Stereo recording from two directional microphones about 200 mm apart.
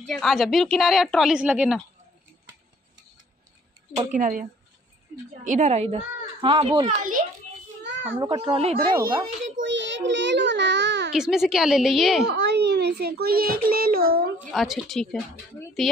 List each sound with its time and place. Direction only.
0.0 s a woman's voice: centre (ahead or behind)
4.0 s a woman's voice: 40° right (ahead or behind)
8.1 s a child's voice: 20° right (ahead or behind)
9.6 s child singing: 65° right (ahead or behind)
11.1 s a woman's voice: centre (ahead or behind)
12.3 s a child's voice: 60° right (ahead or behind)
14.5 s a woman's voice: centre (ahead or behind)